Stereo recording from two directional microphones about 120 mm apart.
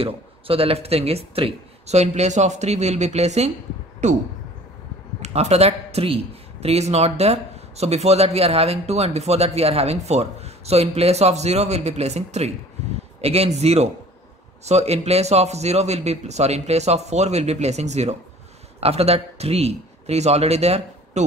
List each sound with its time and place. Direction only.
0.0 s speech: 50° right (ahead or behind); by 4.2 s 75° right (ahead or behind)
5.2 s a man's voice: 65° right (ahead or behind)